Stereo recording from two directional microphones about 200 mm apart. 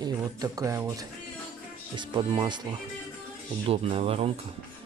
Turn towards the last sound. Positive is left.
turn(degrees=-30)  # may be behind; listen again after turning